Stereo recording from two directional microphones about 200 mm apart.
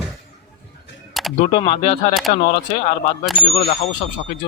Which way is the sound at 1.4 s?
30° left (ahead or behind).